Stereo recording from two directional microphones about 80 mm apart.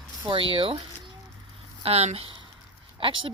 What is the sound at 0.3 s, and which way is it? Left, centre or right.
Speech, right.